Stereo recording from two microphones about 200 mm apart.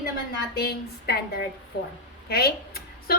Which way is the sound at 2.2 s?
50° left (ahead or behind).